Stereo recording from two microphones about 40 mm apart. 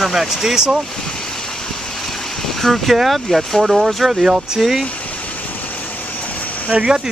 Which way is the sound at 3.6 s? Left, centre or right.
Centre.